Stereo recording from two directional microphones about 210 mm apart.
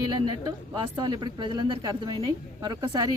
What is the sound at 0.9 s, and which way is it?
Speech, 20° right (ahead or behind).